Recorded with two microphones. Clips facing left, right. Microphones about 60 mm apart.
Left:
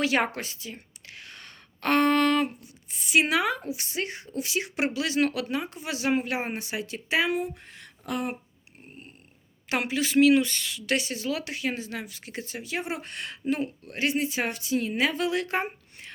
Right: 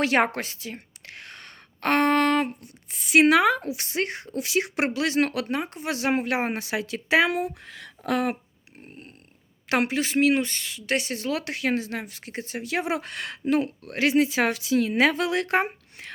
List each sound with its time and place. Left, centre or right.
0.0 s a woman's voice: right
2.9 s speech: right
9.6 s speech: right
10.0 s speech: right
10.9 s speech: right
12.6 s speech: right